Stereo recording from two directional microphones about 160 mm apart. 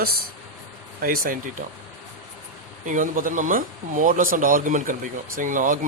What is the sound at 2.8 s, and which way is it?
Speech, 55° right (ahead or behind).